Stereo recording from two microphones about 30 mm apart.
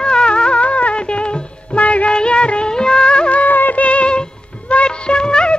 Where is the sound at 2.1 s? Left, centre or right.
Left.